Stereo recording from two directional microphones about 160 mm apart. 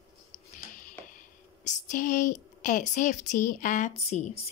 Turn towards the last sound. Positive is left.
turn(degrees=45)  # may be behind; listen again after turning